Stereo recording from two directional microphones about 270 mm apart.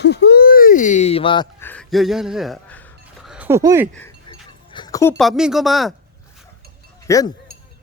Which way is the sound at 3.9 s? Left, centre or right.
Centre.